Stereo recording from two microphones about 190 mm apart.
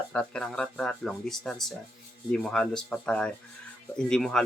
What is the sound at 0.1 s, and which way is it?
Speech, 5° left (ahead or behind).